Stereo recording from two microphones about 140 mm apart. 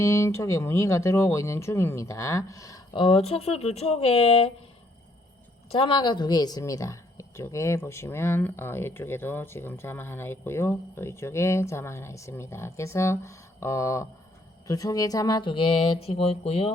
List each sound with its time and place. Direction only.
0.0 s a woman's voice: 20° left (ahead or behind)
3.0 s speech: 45° left (ahead or behind)
5.7 s a woman's voice: 40° left (ahead or behind)